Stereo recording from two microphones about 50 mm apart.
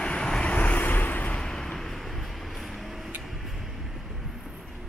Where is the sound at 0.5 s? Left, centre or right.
Left.